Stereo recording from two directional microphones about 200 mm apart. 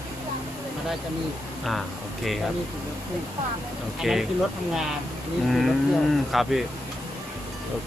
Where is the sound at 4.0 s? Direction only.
Centre (ahead or behind).